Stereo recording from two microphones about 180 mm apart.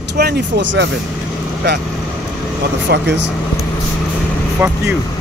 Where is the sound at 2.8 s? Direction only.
75° right (ahead or behind).